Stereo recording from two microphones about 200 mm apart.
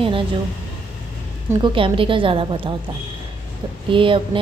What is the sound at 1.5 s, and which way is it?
A woman's voice, 25° right (ahead or behind).